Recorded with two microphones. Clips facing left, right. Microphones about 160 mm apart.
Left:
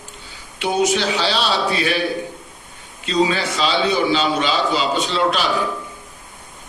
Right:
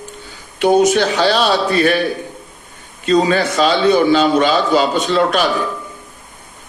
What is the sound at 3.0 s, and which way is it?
A man's voice, 50° right (ahead or behind).